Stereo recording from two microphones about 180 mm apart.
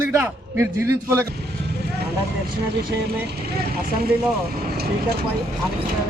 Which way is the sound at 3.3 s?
60° right (ahead or behind).